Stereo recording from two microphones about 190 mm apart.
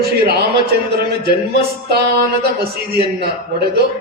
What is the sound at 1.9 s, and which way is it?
Speech, 60° right (ahead or behind).